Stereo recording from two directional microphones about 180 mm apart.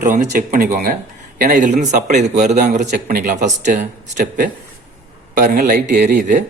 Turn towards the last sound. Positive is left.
turn(degrees=-45)  # may be behind; listen again after turning